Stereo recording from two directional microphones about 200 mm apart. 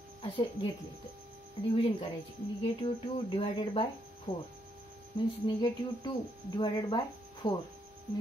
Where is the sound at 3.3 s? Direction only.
25° left (ahead or behind).